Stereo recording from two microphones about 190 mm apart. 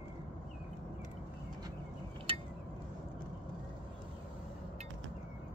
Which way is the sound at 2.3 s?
30° right (ahead or behind).